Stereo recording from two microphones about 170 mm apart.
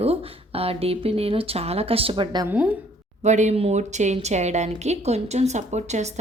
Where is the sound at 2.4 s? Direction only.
10° right (ahead or behind).